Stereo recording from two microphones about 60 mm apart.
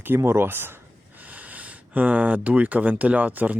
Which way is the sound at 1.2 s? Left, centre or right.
Right.